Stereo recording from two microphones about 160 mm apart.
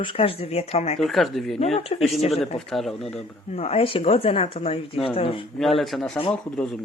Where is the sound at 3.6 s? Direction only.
35° left (ahead or behind).